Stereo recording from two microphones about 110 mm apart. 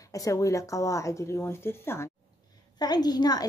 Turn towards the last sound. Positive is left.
turn(degrees=35)  # may be behind; listen again after turning